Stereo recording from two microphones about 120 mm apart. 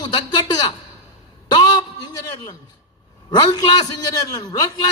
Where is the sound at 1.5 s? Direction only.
35° left (ahead or behind).